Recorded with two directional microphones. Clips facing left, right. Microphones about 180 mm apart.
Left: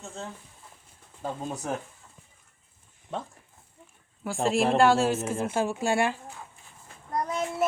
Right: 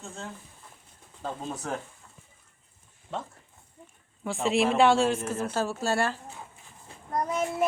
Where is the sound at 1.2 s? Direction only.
15° left (ahead or behind).